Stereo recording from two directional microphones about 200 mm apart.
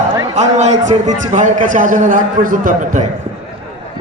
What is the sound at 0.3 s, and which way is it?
A man's voice, 35° right (ahead or behind).